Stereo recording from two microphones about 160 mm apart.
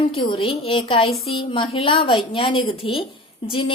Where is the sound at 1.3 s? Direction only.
30° left (ahead or behind).